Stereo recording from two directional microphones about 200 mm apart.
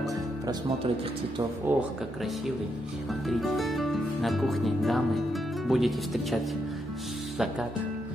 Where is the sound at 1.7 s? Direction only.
10° right (ahead or behind).